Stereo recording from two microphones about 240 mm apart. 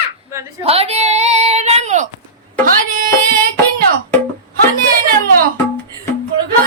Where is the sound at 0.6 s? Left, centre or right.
Right.